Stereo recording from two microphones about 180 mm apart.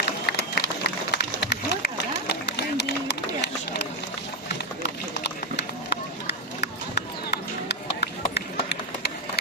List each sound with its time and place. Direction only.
0.3 s a sound: 65° left (ahead or behind)
2.3 s run: 70° left (ahead or behind)
5.2 s run: 70° left (ahead or behind)